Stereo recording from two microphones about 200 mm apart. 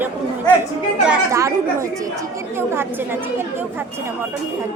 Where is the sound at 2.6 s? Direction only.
10° right (ahead or behind).